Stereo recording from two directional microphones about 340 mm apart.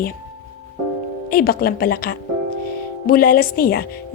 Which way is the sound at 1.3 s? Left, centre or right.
Left.